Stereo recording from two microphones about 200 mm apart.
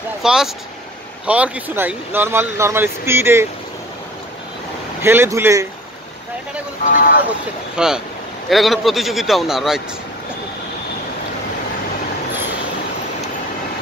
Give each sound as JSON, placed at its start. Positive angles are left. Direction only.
{"t": 0.2, "sound": "speech", "side_deg": -5}
{"t": 5.0, "sound": "speech", "side_deg": -10}
{"t": 6.9, "sound": "speech", "side_deg": 45}
{"t": 7.7, "sound": "a man's voice", "side_deg": -5}